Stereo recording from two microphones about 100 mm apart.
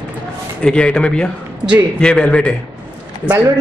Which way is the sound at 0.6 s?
10° left (ahead or behind).